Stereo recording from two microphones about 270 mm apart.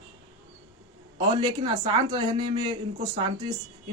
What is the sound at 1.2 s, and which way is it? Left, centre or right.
Speech, centre.